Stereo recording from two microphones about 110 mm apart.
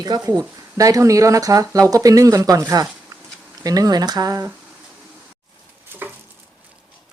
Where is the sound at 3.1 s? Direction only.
35° right (ahead or behind).